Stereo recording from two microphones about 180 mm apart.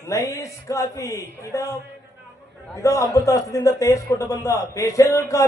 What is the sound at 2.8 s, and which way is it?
Speech, 15° left (ahead or behind).